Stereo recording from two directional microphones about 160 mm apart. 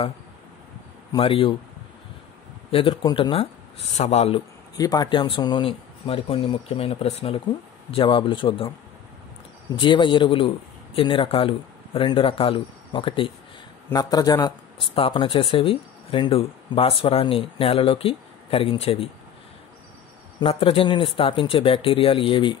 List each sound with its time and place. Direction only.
1.1 s speech: 35° left (ahead or behind)
2.7 s speech: 30° left (ahead or behind)
4.7 s speech: 25° left (ahead or behind)
9.8 s speech: 30° left (ahead or behind)
20.3 s speech: 35° left (ahead or behind)